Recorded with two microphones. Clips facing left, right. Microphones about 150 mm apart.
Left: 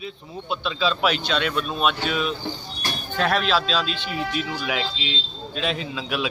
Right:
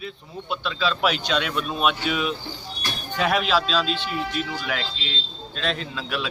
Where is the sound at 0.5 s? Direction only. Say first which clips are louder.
Left 1 dB; 25° left (ahead or behind).